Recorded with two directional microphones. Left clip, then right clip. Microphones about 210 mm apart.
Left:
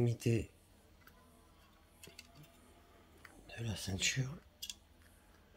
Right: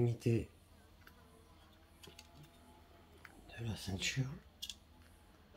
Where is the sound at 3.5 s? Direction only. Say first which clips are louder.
Left 2 dB; 40° left (ahead or behind).